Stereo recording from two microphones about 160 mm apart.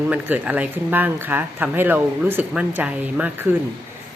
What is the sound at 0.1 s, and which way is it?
Speech, 10° right (ahead or behind).